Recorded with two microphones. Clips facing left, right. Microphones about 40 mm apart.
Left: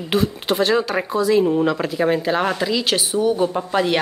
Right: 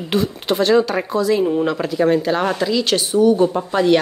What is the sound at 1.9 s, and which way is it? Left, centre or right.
A woman's voice, centre.